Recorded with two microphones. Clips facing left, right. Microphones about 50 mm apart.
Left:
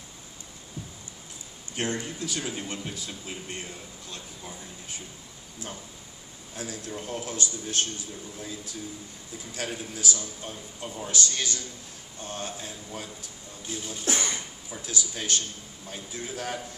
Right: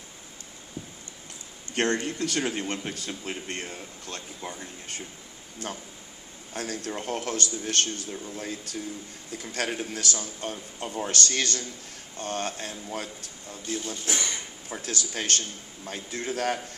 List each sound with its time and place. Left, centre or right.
1.7 s speech: right
6.5 s a man's voice: right
14.0 s speech: left
14.7 s speech: right